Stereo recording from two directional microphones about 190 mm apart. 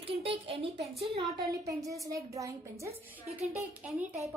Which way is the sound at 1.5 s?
15° right (ahead or behind).